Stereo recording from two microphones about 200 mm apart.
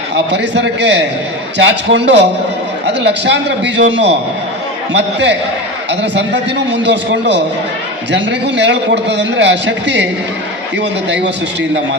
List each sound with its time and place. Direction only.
0.3 s a man's voice: 60° right (ahead or behind)